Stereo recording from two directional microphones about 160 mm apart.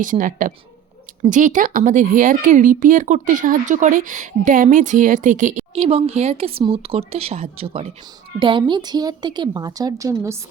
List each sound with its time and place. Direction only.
0.0 s a woman's voice: 55° right (ahead or behind)
5.8 s a woman's voice: 35° right (ahead or behind); by 10.3 s 20° right (ahead or behind)